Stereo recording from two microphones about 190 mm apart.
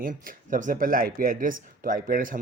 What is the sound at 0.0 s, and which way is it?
Speech, 45° right (ahead or behind).